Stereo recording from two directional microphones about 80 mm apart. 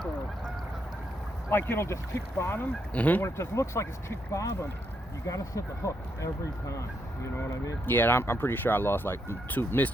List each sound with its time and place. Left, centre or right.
1.5 s speech: left
3.2 s speech: left
7.9 s speech: left